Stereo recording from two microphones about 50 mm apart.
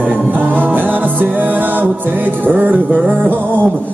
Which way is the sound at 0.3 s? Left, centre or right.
Right.